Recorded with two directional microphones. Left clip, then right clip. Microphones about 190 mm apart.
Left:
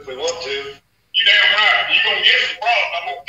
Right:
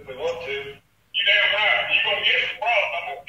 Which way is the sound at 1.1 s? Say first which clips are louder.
Left 6 dB; 40° left (ahead or behind).